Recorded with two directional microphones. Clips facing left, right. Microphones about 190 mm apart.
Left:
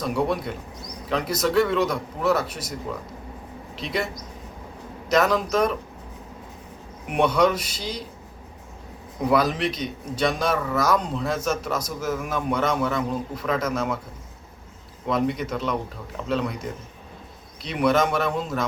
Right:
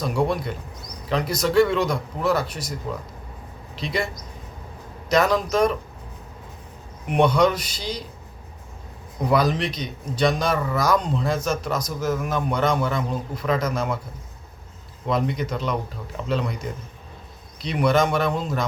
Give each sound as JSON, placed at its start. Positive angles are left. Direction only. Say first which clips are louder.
{"t": 0.0, "sound": "a man's voice", "louder": "right 1 dB", "side_deg": 0}
{"t": 3.8, "sound": "a man's voice", "louder": "right 1 dB", "side_deg": 0}
{"t": 7.1, "sound": "a man's voice", "louder": "right 2 dB", "side_deg": 5}
{"t": 9.3, "sound": "a man's voice", "louder": "right 1 dB", "side_deg": 5}
{"t": 15.0, "sound": "a man's voice", "louder": "even", "side_deg": 0}
{"t": 17.6, "sound": "a man's voice", "louder": "right 1 dB", "side_deg": 0}